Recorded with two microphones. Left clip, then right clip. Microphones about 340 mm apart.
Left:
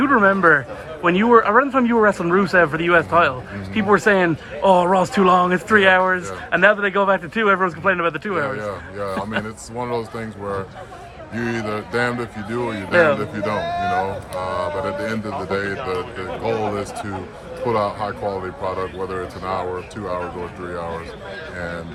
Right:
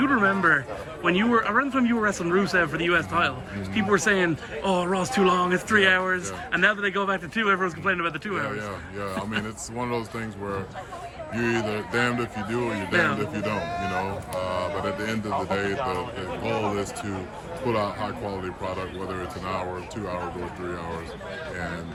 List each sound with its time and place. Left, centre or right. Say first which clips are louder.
0.0 s speech: left 7 dB; centre
11.3 s speech: left 2 dB; centre
13.6 s speech: left 7 dB; left
14.3 s speech: left 4 dB; centre